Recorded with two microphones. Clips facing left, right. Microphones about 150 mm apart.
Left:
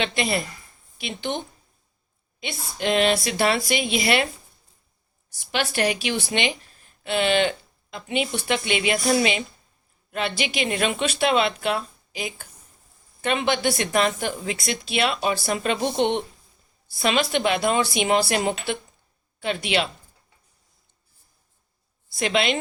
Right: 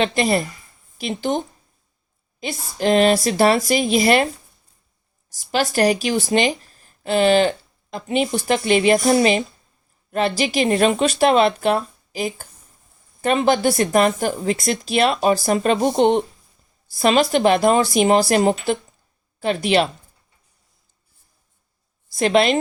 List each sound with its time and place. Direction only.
0.0 s speech: 40° right (ahead or behind)
2.4 s speech: 40° right (ahead or behind)
5.3 s speech: 40° right (ahead or behind)
22.1 s a woman's voice: 45° right (ahead or behind)